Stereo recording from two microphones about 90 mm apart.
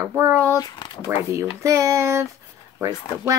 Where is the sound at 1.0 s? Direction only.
35° right (ahead or behind).